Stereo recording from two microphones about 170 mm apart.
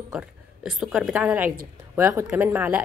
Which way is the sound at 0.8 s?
5° right (ahead or behind).